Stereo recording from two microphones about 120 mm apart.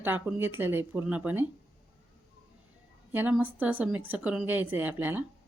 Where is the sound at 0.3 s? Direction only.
20° right (ahead or behind).